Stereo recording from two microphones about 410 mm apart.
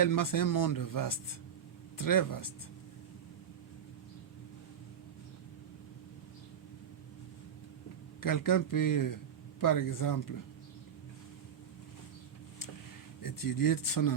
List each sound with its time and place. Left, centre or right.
0.0 s speech: left
8.2 s speech: left
13.2 s speech: left